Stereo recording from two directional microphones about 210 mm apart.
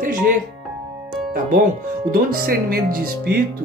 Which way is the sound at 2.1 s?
45° right (ahead or behind).